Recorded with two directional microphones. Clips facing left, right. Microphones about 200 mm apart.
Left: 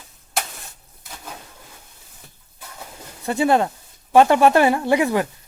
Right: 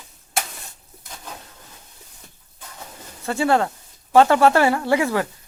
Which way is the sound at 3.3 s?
20° left (ahead or behind).